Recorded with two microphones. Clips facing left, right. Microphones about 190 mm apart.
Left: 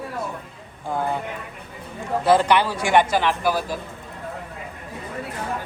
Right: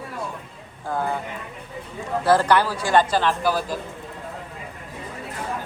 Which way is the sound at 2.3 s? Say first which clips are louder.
Left 1 dB; 20° left (ahead or behind).